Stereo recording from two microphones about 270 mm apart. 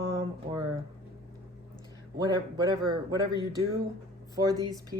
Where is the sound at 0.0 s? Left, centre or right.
Centre.